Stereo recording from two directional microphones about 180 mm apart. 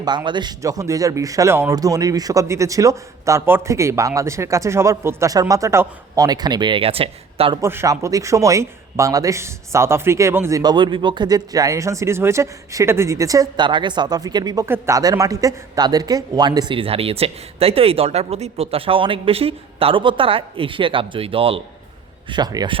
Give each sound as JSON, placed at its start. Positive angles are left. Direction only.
{"t": 0.0, "sound": "speech", "side_deg": -25}
{"t": 7.6, "sound": "a man's voice", "side_deg": -15}